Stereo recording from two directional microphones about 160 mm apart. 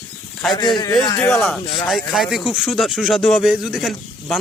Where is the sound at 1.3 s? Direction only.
Centre (ahead or behind).